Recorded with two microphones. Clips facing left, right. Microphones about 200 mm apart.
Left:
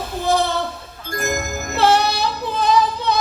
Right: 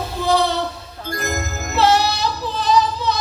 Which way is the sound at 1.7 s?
55° left (ahead or behind).